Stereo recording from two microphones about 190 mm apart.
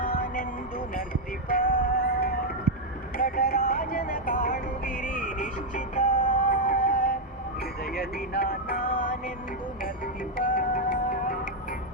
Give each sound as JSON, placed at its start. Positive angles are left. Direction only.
{"t": 0.0, "sound": "music", "side_deg": 45}
{"t": 1.5, "sound": "music", "side_deg": 50}
{"t": 10.3, "sound": "music", "side_deg": 50}